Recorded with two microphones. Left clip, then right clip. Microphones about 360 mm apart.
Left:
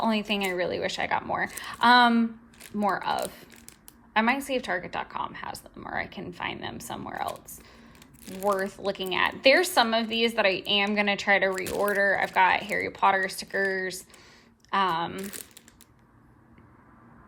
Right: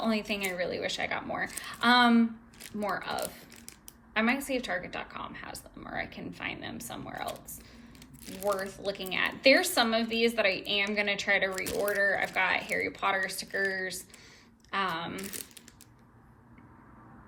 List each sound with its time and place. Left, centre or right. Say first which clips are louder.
0.0 s speech: left 4 dB; centre
8.3 s speech: left 5 dB; centre